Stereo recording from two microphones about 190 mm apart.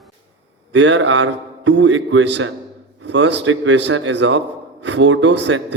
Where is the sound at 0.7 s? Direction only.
80° right.